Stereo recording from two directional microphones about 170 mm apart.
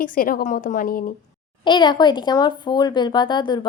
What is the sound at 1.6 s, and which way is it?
Speech, 25° left (ahead or behind).